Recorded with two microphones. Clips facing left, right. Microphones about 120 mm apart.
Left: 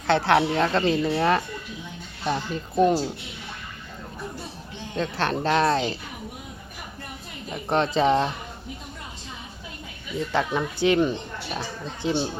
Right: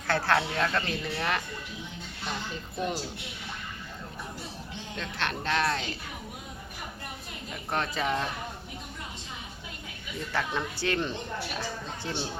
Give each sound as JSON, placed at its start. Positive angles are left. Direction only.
{"t": 0.1, "sound": "speech", "side_deg": 20}
{"t": 2.2, "sound": "speech", "side_deg": 70}
{"t": 4.9, "sound": "speech", "side_deg": 35}
{"t": 7.5, "sound": "speech", "side_deg": 25}
{"t": 10.3, "sound": "speech", "side_deg": 20}